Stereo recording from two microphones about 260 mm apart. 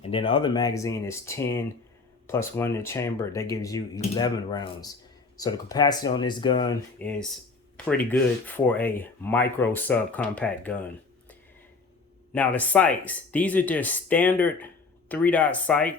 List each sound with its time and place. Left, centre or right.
0.0 s speech: left
7.0 s speech: centre
12.3 s speech: centre